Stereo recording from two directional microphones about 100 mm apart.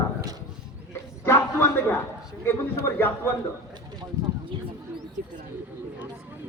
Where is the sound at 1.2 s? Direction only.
25° left (ahead or behind).